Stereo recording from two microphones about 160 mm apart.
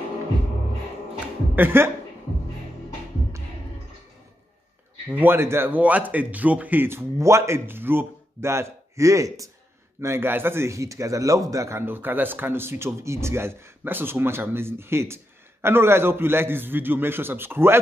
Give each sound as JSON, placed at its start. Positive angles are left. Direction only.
{"t": 1.5, "sound": "speech", "side_deg": -15}
{"t": 5.1, "sound": "a man's voice", "side_deg": -15}